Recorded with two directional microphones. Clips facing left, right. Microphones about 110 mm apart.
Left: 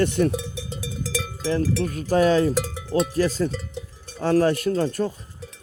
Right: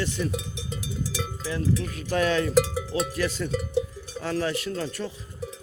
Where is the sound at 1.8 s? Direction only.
40° left (ahead or behind).